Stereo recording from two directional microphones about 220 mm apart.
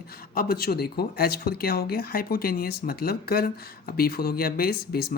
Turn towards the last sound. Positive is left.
turn(degrees=45)  # may be behind; listen again after turning